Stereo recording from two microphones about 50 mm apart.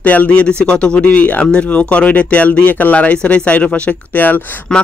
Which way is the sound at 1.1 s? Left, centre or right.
Left.